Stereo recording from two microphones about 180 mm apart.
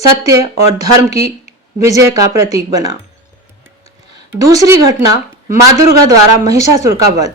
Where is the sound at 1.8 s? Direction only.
15° right (ahead or behind).